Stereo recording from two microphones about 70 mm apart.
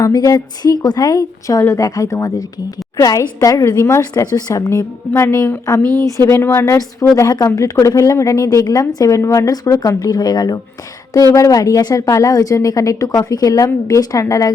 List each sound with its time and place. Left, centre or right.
0.1 s a woman's voice: left
4.1 s a woman's voice: left
4.7 s a woman's voice: left
5.8 s speech: right
6.1 s a woman's voice: left
7.2 s a woman's voice: left
10.0 s speech: left
11.3 s a woman's voice: left